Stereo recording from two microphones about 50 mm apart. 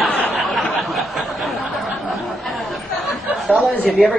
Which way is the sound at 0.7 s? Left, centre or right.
Centre.